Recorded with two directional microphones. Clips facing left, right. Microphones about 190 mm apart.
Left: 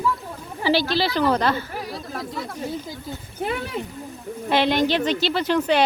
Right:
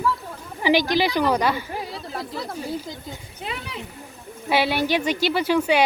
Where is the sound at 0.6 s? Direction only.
15° right (ahead or behind).